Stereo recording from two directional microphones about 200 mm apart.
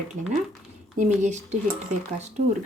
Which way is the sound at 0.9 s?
35° right (ahead or behind).